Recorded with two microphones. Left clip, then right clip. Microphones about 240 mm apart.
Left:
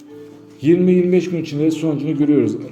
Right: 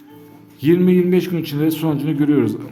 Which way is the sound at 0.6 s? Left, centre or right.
Centre.